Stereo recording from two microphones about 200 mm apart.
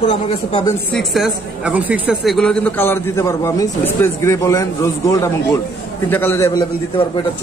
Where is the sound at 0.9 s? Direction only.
Centre (ahead or behind).